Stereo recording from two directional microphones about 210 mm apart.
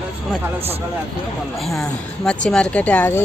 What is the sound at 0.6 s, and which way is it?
Speech, 30° right (ahead or behind).